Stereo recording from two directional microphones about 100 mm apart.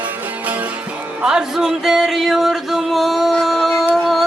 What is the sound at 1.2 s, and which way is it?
Music, 10° right (ahead or behind).